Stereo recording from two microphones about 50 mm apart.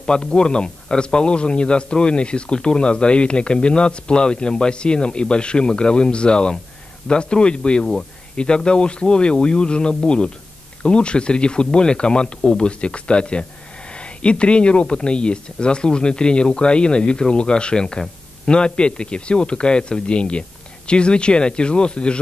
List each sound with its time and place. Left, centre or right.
0.0 s a man's voice: centre